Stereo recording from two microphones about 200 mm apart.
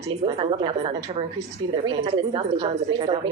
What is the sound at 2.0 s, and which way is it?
A woman's voice, 25° right (ahead or behind).